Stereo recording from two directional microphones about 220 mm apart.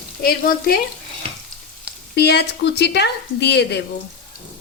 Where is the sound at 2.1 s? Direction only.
50° left (ahead or behind).